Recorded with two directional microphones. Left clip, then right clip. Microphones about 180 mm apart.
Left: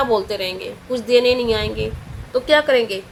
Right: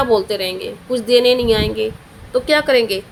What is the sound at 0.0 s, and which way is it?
A woman's voice, 20° right (ahead or behind).